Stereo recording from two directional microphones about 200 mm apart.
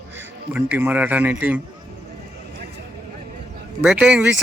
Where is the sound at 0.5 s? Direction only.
10° right (ahead or behind).